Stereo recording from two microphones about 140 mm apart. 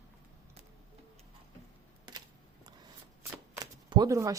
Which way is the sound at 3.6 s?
30° right (ahead or behind).